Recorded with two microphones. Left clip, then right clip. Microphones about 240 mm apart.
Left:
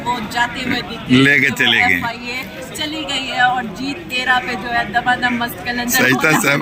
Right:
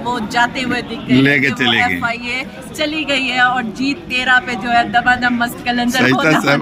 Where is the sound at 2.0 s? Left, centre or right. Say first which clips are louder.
Right 4 dB; right.